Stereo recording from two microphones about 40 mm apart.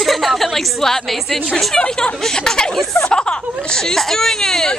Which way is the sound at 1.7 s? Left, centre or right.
Centre.